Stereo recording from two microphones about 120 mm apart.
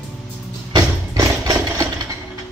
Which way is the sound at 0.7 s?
30° right (ahead or behind).